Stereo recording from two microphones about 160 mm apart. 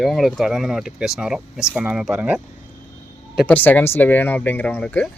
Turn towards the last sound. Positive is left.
turn(degrees=10)  # may be behind; listen again after turning